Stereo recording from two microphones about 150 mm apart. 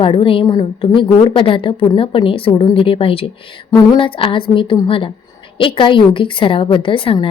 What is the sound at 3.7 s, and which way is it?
A woman's voice, 25° left (ahead or behind).